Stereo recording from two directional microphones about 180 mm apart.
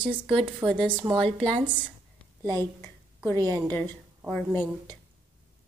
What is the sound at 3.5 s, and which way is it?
Speech, 10° left (ahead or behind).